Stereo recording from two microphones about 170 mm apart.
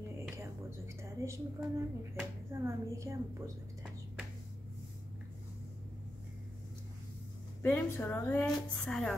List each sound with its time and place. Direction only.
0.4 s speech: 15° right (ahead or behind)
7.6 s a woman's voice: 10° left (ahead or behind)